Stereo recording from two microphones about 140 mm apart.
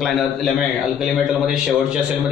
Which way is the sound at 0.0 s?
Centre (ahead or behind).